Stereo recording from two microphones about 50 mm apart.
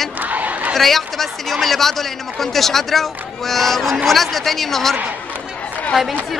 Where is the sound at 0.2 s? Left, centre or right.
Right.